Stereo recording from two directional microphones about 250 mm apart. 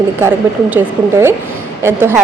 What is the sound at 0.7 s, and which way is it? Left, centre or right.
A woman's voice, centre.